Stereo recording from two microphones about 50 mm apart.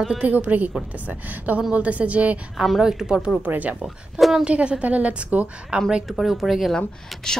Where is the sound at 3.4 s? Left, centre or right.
Right.